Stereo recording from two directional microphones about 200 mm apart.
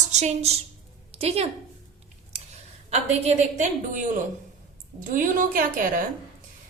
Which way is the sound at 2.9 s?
35° right (ahead or behind).